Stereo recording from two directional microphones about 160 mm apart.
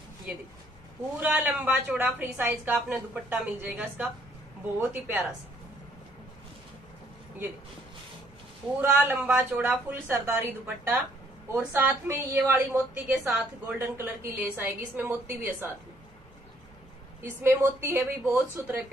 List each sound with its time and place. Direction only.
1.2 s a woman's voice: 10° right (ahead or behind)
8.8 s a woman's voice: 10° right (ahead or behind)
17.2 s a woman's voice: 15° right (ahead or behind)